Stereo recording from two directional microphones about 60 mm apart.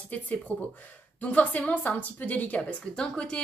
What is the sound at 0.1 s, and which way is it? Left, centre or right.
A woman's voice, left.